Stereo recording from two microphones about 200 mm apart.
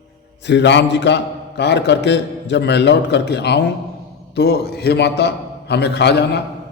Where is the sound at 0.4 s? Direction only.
60° left (ahead or behind).